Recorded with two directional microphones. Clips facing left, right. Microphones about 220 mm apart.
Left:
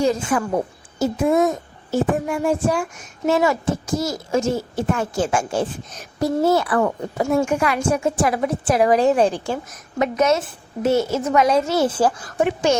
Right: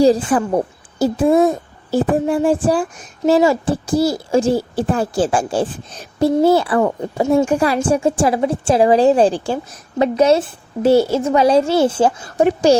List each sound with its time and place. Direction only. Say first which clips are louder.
0.0 s a child's voice: right 6 dB; 35° right (ahead or behind)
12.4 s a child's voice: right 6 dB; 35° right (ahead or behind)